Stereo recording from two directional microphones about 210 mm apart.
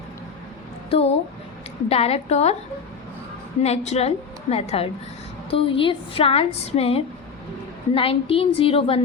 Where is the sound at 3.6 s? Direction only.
30° left (ahead or behind).